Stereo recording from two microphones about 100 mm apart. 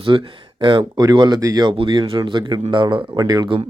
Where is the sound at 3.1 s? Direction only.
45° right (ahead or behind).